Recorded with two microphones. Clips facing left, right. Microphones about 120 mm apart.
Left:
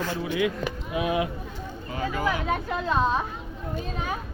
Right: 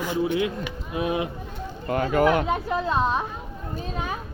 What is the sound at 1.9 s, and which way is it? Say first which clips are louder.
Speech: right 7 dB; 60° right (ahead or behind).